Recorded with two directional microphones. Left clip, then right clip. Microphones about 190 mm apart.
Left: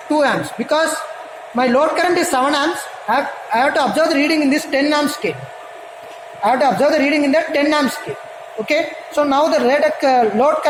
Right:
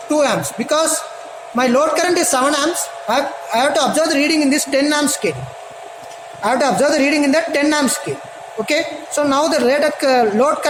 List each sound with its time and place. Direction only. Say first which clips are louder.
0.1 s a woman's voice: even; 15° right (ahead or behind)
6.4 s a woman's voice: left 1 dB; 20° right (ahead or behind)